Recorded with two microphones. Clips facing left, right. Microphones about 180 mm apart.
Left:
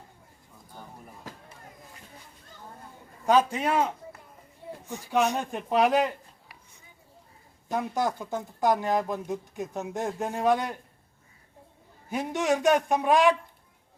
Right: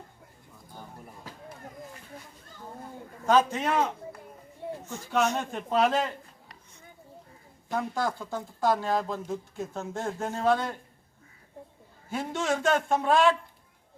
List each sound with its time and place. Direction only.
3.2 s a man's voice: 10° left (ahead or behind)
7.7 s speech: 20° left (ahead or behind)
12.0 s speech: 15° left (ahead or behind)